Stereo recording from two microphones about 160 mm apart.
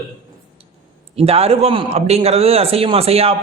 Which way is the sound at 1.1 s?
40° right (ahead or behind).